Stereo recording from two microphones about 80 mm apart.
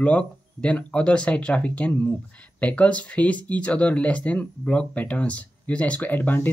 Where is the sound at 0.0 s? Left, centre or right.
Centre.